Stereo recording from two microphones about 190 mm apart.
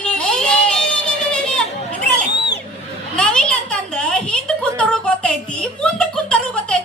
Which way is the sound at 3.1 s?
5° left (ahead or behind).